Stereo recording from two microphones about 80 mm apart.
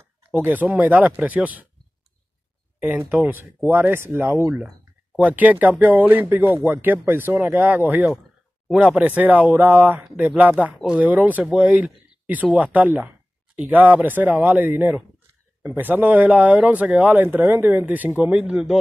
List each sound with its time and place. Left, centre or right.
0.3 s speech: right
2.8 s speech: right
5.1 s speech: centre